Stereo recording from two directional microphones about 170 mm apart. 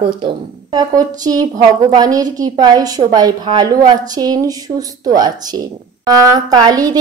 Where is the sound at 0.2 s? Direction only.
25° right (ahead or behind).